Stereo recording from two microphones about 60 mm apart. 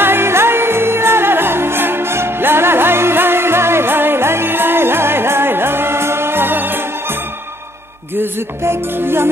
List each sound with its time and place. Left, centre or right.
0.0 s music: right
8.2 s music: right